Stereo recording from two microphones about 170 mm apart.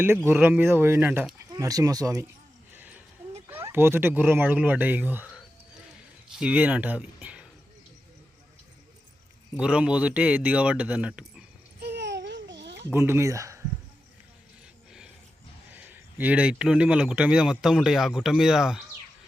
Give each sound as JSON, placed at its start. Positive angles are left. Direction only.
{"t": 0.3, "sound": "speech", "side_deg": -10}
{"t": 2.7, "sound": "a sound", "side_deg": -10}
{"t": 3.5, "sound": "speech", "side_deg": -10}
{"t": 6.4, "sound": "speech", "side_deg": -10}
{"t": 9.6, "sound": "speech", "side_deg": -5}
{"t": 11.8, "sound": "babbling", "side_deg": -80}
{"t": 12.9, "sound": "speech", "side_deg": -15}
{"t": 15.7, "sound": "a man's voice", "side_deg": -10}